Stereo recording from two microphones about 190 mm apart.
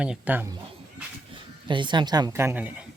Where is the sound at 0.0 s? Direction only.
5° right (ahead or behind).